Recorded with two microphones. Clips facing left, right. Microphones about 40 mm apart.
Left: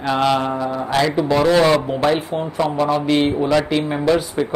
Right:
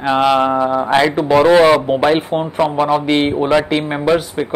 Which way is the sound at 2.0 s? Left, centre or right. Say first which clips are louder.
Right 4 dB; right.